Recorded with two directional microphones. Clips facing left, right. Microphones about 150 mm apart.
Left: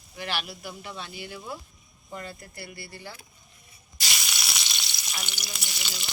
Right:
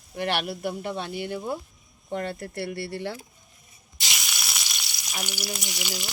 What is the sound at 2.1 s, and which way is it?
Speech, 65° right (ahead or behind).